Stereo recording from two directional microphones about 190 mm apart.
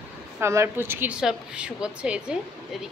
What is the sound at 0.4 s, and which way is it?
A woman's voice, 15° right (ahead or behind).